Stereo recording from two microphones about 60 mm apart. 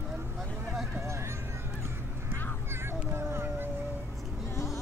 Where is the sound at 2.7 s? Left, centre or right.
Right.